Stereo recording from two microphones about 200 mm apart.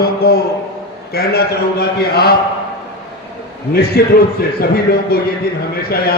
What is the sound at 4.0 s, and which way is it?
A man's voice, 50° left (ahead or behind).